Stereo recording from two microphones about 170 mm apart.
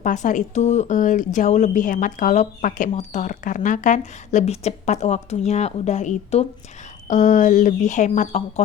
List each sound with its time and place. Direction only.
0.0 s speech: 50° left (ahead or behind)